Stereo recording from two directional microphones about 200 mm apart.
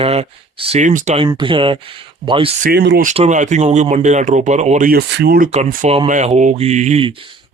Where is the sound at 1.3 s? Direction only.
25° right (ahead or behind).